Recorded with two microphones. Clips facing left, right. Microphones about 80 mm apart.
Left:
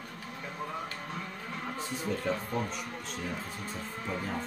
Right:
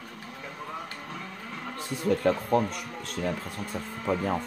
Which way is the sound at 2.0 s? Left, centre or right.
Right.